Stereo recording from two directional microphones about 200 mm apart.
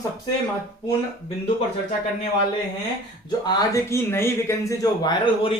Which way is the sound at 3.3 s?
20° left (ahead or behind).